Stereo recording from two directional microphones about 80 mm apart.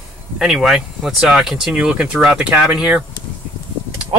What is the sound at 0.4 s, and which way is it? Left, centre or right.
Speech, centre.